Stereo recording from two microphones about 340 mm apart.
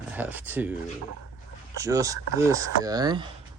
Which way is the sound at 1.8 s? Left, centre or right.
Centre.